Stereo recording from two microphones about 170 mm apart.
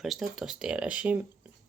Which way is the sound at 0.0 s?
Centre (ahead or behind).